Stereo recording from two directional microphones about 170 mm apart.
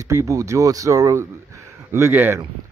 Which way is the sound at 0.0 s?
20° right (ahead or behind).